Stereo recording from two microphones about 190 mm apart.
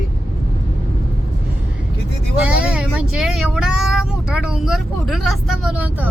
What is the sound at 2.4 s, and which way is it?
Speech, 5° right (ahead or behind).